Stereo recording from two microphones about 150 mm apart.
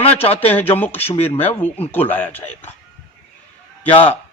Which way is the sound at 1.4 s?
15° left (ahead or behind).